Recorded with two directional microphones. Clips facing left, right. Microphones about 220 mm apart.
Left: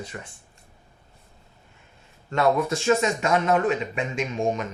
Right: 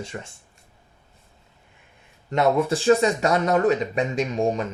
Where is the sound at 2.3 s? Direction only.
25° right (ahead or behind).